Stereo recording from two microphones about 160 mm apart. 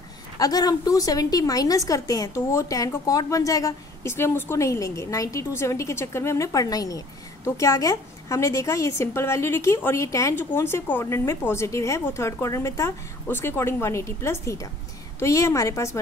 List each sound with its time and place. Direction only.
0.4 s a woman's voice: 25° left (ahead or behind)